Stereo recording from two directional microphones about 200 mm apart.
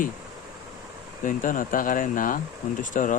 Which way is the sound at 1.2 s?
40° left (ahead or behind).